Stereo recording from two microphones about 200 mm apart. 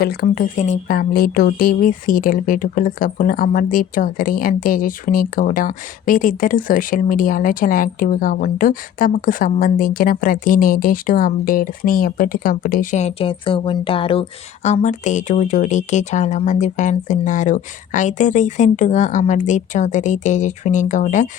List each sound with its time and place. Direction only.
0.0 s speech: 50° left (ahead or behind)